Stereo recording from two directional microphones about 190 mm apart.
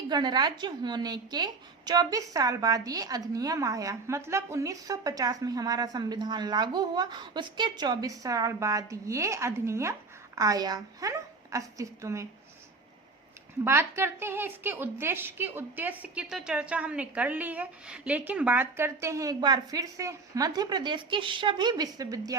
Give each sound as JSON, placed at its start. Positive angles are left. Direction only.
{"t": 0.1, "sound": "a woman's voice", "side_deg": -20}
{"t": 13.7, "sound": "a woman's voice", "side_deg": -15}